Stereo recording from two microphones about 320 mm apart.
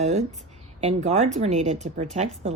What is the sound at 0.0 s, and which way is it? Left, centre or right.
A woman's voice, right.